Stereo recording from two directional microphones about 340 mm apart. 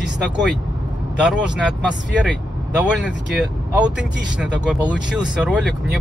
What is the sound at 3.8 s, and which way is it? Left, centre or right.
Speech, centre.